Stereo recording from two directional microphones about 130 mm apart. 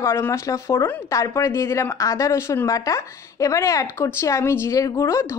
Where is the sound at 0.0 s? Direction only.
20° left (ahead or behind).